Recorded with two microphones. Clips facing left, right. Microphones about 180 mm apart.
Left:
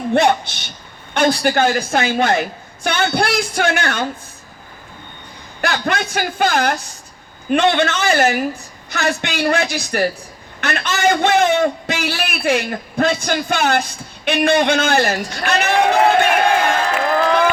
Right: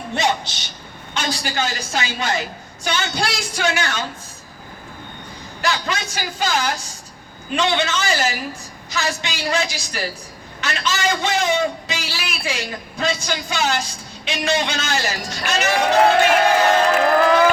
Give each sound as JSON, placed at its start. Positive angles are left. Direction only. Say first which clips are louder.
{"t": 0.1, "sound": "a man's voice", "louder": "left 7 dB", "side_deg": 55}
{"t": 5.6, "sound": "a man's voice", "louder": "left 4 dB", "side_deg": 55}